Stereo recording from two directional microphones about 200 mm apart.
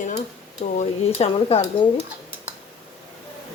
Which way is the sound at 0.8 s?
30° left (ahead or behind).